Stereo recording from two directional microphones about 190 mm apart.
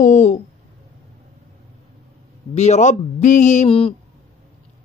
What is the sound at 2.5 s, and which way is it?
Speech, 35° left (ahead or behind).